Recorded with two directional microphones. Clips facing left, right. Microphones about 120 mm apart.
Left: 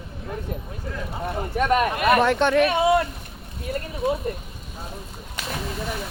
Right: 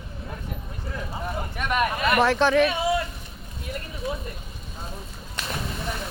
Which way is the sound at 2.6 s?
60° left (ahead or behind).